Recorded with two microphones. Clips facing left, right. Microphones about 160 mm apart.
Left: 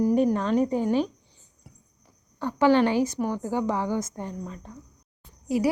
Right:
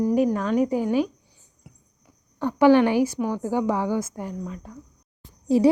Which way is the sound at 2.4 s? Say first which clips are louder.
Right 4 dB; 15° right (ahead or behind).